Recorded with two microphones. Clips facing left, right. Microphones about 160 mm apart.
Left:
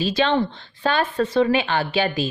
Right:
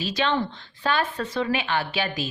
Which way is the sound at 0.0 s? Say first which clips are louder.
Left 5 dB; 30° left (ahead or behind).